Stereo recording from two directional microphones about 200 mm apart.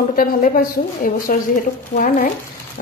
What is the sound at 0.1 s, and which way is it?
A woman's voice, 45° left (ahead or behind).